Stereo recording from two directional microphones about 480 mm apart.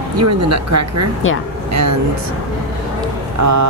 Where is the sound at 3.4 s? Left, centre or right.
Right.